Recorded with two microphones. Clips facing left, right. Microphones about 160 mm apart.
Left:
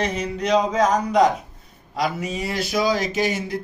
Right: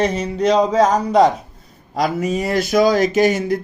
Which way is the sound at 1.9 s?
45° right (ahead or behind).